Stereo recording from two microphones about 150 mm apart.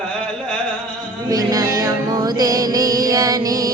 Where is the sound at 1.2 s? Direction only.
25° right (ahead or behind).